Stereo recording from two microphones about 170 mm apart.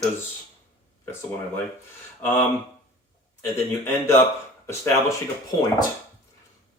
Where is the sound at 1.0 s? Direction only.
15° left (ahead or behind).